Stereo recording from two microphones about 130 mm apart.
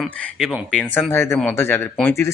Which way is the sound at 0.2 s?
5° left (ahead or behind).